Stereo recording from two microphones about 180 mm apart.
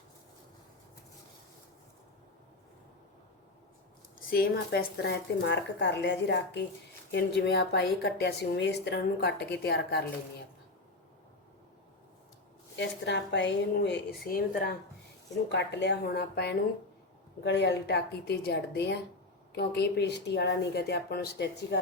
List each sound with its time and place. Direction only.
4.3 s a woman's voice: 55° left (ahead or behind)
12.7 s a woman's voice: 75° left (ahead or behind)
14.3 s speech: 50° left (ahead or behind)
15.4 s a woman's voice: 70° left (ahead or behind)